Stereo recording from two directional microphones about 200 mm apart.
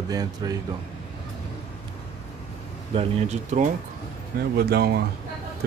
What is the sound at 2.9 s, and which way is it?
Speech, 35° right (ahead or behind).